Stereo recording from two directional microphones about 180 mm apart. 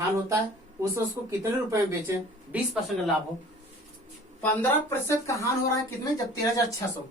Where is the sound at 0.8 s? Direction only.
15° right (ahead or behind).